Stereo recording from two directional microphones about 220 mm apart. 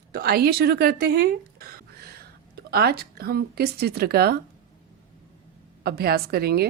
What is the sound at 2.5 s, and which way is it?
A woman's voice, 45° right (ahead or behind).